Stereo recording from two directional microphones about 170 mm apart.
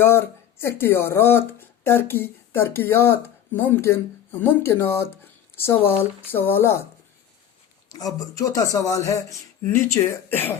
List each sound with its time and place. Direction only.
0.0 s speech: 15° left (ahead or behind)
7.9 s speech: 20° left (ahead or behind)